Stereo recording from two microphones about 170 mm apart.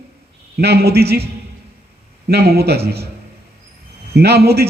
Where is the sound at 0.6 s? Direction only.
70° right (ahead or behind).